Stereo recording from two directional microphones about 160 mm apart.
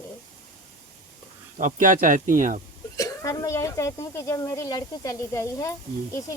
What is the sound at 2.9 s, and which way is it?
Speech, 20° left (ahead or behind).